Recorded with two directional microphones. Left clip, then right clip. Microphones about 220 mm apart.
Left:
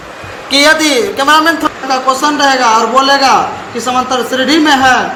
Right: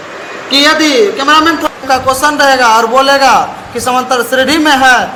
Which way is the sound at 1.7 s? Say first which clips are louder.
Right 1 dB; 45° right (ahead or behind).